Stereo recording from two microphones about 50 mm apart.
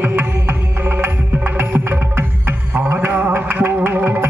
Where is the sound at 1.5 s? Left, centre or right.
Right.